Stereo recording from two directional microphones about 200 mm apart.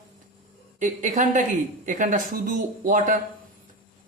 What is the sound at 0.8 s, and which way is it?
A man's voice, 40° right (ahead or behind).